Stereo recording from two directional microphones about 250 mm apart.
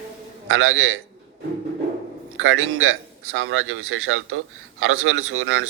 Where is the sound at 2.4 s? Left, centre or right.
Right.